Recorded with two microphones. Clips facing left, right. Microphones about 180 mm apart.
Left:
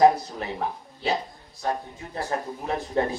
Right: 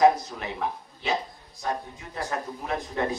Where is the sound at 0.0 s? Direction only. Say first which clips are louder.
Left 2 dB; 35° left (ahead or behind).